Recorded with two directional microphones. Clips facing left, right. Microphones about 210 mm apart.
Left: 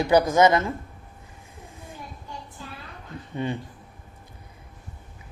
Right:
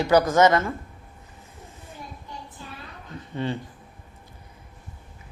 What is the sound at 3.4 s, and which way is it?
Speech, 15° left (ahead or behind).